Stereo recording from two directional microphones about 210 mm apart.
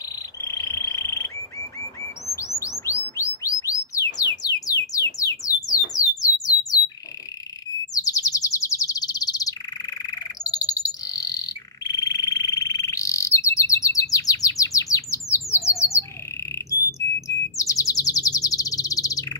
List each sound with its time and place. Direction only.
0.4 s frog: 15° left (ahead or behind)
2.6 s bird: 15° left (ahead or behind)
5.2 s a sound: 15° left (ahead or behind)
7.9 s bird: 15° left (ahead or behind)
17.6 s bird: 15° left (ahead or behind)